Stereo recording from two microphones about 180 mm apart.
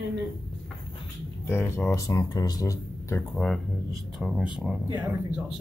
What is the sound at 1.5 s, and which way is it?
A man's voice, 10° left (ahead or behind).